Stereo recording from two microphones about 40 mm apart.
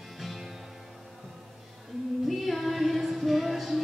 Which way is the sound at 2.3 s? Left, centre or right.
Centre.